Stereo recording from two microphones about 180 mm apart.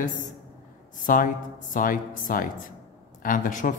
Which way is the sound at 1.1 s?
50° left (ahead or behind).